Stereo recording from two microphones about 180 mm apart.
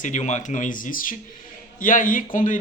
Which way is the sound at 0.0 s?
40° left (ahead or behind).